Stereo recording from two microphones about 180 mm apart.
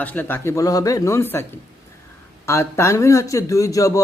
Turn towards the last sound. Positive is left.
turn(degrees=20)  # may be behind; listen again after turning